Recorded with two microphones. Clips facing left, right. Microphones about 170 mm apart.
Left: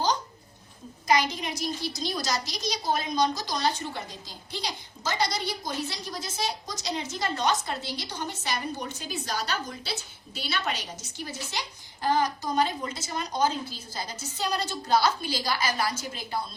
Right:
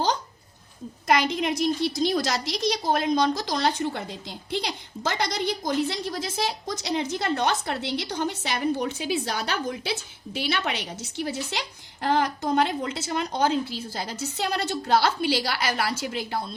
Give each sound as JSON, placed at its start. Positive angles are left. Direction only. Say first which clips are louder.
{"t": 1.0, "sound": "a woman's voice", "louder": "right 3 dB", "side_deg": -60}